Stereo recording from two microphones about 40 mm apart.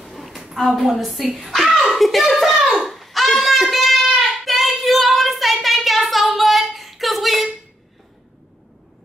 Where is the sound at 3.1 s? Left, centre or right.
Centre.